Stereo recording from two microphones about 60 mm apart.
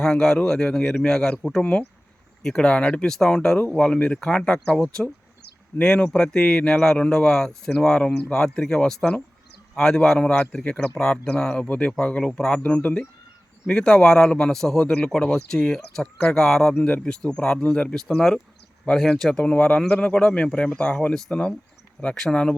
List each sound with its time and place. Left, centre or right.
0.0 s speech: centre
1.4 s speech: centre
2.4 s speech: centre
5.8 s speech: centre